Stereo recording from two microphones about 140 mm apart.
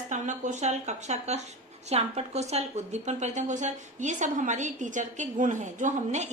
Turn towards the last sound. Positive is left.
turn(degrees=-55)  # may be behind; listen again after turning